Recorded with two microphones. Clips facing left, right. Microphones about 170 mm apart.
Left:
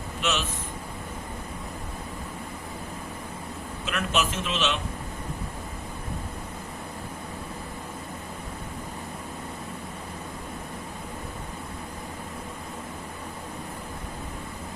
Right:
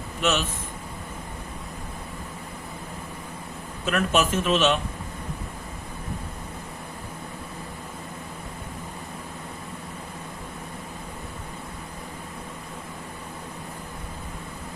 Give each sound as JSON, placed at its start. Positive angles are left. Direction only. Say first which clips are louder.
{"t": 0.2, "sound": "a man's voice", "louder": "right 4 dB", "side_deg": -50}
{"t": 3.8, "sound": "a man's voice", "louder": "right 5 dB", "side_deg": -45}